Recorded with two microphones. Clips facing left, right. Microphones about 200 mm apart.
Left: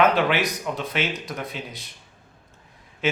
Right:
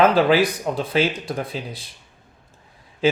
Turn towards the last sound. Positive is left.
turn(degrees=-30)  # may be behind; listen again after turning